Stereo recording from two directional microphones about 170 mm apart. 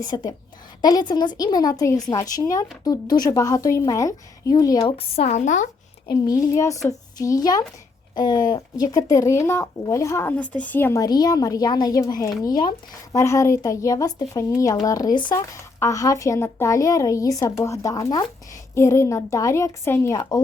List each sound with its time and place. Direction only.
0.0 s speech: 25° left (ahead or behind)
4.9 s a woman's voice: 35° left (ahead or behind)
6.1 s a woman's voice: 20° left (ahead or behind)